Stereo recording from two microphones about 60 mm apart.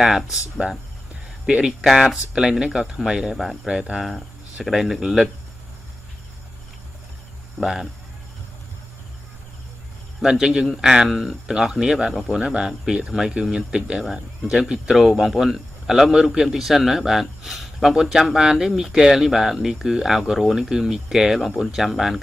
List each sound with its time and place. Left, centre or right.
0.0 s a man's voice: centre
1.7 s a man's voice: centre
4.6 s a man's voice: centre
7.6 s a man's voice: centre
10.2 s a man's voice: centre